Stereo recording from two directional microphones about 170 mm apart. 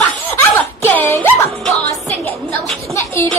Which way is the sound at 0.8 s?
10° left (ahead or behind).